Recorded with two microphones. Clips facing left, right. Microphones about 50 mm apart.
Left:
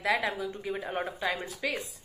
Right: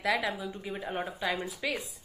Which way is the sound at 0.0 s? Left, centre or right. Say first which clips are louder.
Left 1 dB; centre.